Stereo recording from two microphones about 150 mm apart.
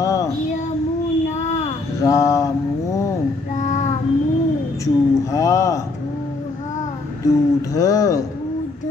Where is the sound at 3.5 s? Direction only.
55° left (ahead or behind).